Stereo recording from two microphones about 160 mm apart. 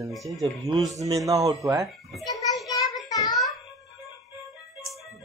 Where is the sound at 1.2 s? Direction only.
20° right (ahead or behind).